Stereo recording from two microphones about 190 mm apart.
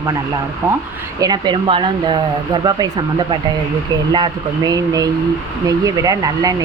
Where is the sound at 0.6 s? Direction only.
15° right (ahead or behind).